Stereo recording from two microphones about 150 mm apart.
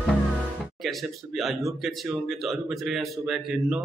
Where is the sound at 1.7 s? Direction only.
Centre (ahead or behind).